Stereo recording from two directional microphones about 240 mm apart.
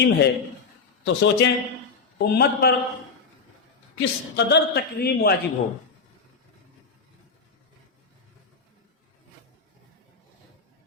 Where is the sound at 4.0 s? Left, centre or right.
Left.